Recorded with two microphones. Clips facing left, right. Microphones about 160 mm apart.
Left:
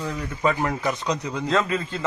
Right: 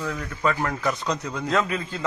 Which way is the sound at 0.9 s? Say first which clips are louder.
Left 1 dB; centre (ahead or behind).